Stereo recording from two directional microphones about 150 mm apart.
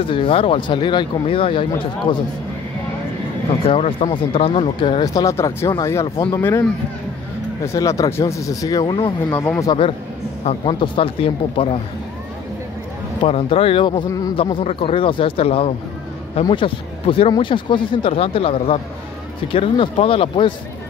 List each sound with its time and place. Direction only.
0.0 s speech: 35° left (ahead or behind)
3.6 s speech: 40° left (ahead or behind); by 6.6 s 20° left (ahead or behind)
7.6 s speech: 20° left (ahead or behind)
9.3 s speech: 10° left (ahead or behind)
10.4 s speech: 35° left (ahead or behind)
13.2 s speech: 35° left (ahead or behind)